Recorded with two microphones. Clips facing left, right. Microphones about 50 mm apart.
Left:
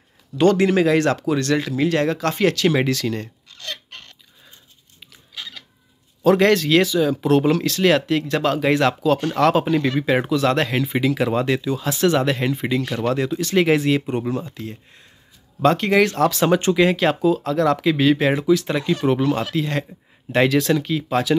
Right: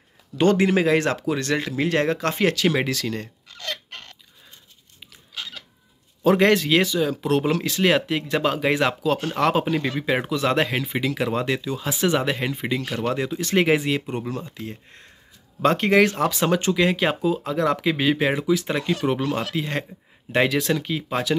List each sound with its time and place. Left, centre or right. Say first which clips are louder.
0.4 s speech: left 3 dB; centre
2.7 s speech: left 4 dB; centre
6.2 s speech: left 2 dB; centre
6.9 s speech: left 4 dB; centre
7.6 s speech: left 3 dB; centre
10.8 s speech: left 5 dB; centre
11.8 s speech: left 3 dB; centre
13.4 s speech: left 1 dB; right
13.7 s speech: left 3 dB; centre
14.0 s speech: left 5 dB; left
14.5 s speech: left 2 dB; right
16.9 s speech: left 4 dB; centre
19.5 s speech: left 3 dB; right
20.3 s speech: left 3 dB; centre